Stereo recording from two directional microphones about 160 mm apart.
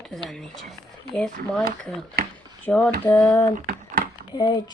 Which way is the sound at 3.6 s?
60° right (ahead or behind).